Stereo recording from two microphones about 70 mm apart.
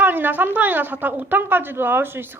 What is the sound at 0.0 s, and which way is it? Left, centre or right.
A woman's voice, right.